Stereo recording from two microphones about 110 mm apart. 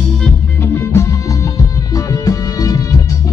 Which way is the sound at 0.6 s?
25° left (ahead or behind).